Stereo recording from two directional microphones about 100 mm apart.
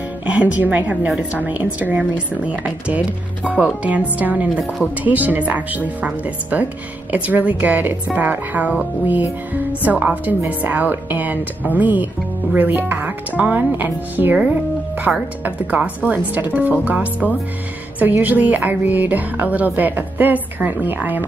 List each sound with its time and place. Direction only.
0.3 s a woman's voice: 15° right (ahead or behind)